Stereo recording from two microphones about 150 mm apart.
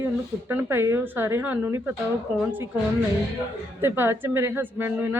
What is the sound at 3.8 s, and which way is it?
A woman's voice, 15° right (ahead or behind).